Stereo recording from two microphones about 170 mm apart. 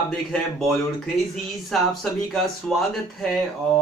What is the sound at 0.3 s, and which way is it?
Speech, centre (ahead or behind).